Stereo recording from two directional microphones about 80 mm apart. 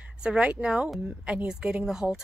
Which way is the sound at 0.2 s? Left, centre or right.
Centre.